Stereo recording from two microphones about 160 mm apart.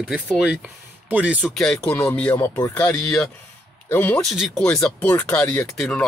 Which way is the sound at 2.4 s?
20° left (ahead or behind).